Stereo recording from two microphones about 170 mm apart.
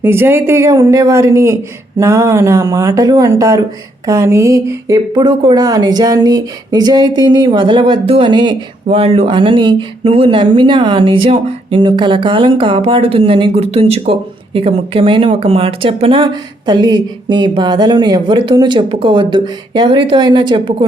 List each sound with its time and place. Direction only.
0.0 s speech: 15° right (ahead or behind)
8.9 s speech: 35° right (ahead or behind)